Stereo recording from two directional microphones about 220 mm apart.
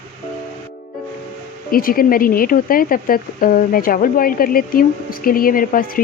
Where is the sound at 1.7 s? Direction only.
40° left (ahead or behind).